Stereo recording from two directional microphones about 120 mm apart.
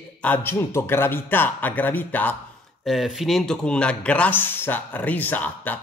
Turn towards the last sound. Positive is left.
turn(degrees=15)  # may be behind; listen again after turning